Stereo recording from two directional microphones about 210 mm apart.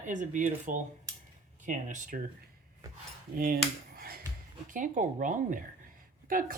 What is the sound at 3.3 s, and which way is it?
Speech, 45° right (ahead or behind).